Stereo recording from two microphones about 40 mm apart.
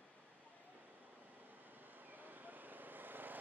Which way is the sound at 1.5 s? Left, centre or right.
Right.